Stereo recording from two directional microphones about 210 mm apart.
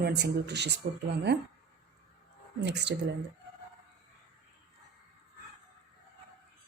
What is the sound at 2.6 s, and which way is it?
Speech, 55° right (ahead or behind).